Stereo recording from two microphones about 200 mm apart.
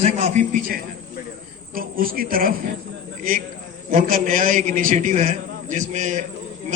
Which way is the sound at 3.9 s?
45° right (ahead or behind).